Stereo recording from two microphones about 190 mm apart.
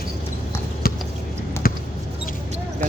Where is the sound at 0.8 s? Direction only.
50° left (ahead or behind).